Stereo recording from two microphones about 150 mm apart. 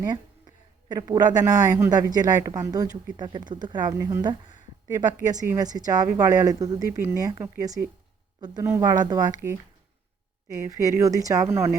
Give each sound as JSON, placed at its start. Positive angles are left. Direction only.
{"t": 0.1, "sound": "a sound", "side_deg": -30}
{"t": 1.8, "sound": "speech", "side_deg": -25}
{"t": 3.9, "sound": "speech", "side_deg": -20}
{"t": 4.2, "sound": "speech", "side_deg": -30}